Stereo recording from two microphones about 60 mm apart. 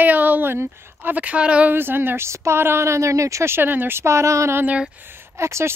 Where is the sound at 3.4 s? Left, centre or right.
Right.